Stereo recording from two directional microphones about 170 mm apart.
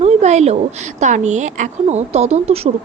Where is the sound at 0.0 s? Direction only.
40° right (ahead or behind).